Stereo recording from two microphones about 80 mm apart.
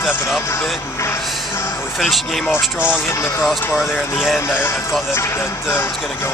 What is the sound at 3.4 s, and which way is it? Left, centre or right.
Speech, centre.